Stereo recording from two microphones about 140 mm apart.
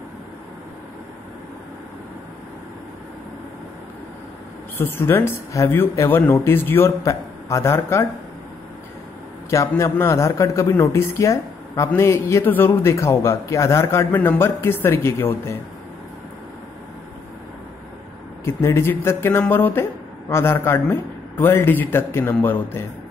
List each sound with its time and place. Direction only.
4.7 s speech: 15° left (ahead or behind)
9.5 s speech: 20° left (ahead or behind)
18.4 s speech: 20° left (ahead or behind)